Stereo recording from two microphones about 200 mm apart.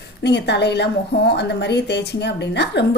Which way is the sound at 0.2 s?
60° left (ahead or behind).